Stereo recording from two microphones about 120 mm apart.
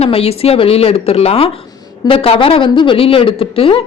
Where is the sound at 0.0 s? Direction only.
55° left (ahead or behind).